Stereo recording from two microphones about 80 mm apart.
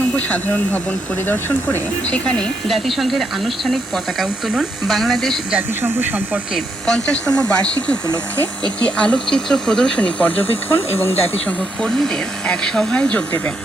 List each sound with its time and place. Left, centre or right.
0.2 s speech: left
2.1 s speech: centre
5.8 s speech: right
6.8 s speech: centre; by 11.1 s left
11.4 s speech: centre